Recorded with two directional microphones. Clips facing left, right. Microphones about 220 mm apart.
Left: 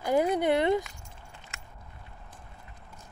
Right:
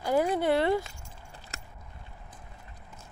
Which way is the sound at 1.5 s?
35° right (ahead or behind).